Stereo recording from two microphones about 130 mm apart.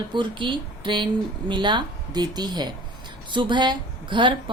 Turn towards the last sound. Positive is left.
turn(degrees=-40)  # may be behind; listen again after turning